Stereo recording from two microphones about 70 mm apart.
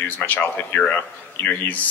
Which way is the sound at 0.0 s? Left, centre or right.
Left.